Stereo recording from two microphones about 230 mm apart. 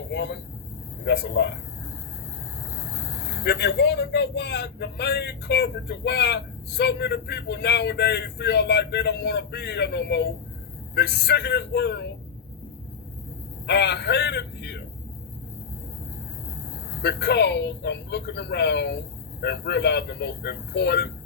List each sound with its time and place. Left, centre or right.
0.1 s speech: left
3.2 s speech: left
13.7 s speech: left
17.0 s speech: left